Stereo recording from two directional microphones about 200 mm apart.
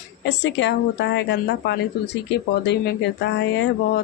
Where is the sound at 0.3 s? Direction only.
60° left (ahead or behind).